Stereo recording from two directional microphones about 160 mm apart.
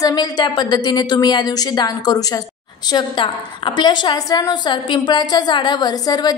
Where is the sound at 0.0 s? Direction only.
25° left (ahead or behind).